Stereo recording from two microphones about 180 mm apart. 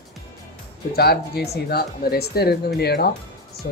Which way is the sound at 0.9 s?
60° left (ahead or behind).